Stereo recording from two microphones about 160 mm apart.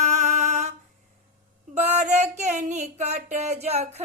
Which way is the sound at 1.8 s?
45° right (ahead or behind).